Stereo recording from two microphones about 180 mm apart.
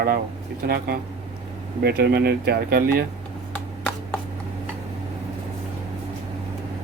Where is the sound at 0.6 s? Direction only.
65° right (ahead or behind).